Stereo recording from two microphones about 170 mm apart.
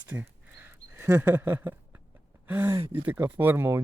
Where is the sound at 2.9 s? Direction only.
10° right (ahead or behind).